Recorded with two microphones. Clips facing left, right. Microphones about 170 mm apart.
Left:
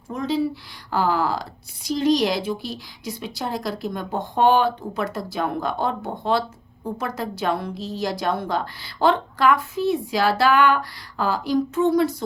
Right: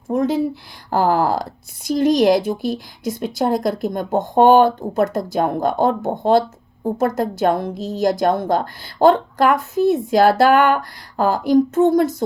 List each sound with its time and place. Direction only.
0.1 s a woman's voice: 50° right (ahead or behind)